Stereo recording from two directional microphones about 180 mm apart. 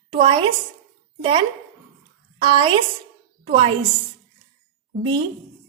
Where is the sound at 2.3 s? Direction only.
25° right (ahead or behind).